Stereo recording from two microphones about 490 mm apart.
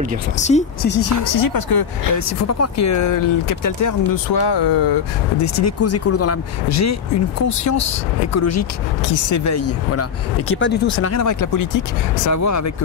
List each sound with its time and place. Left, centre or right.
0.4 s speech: centre
1.2 s speech: left
2.4 s speech: left
5.4 s speech: left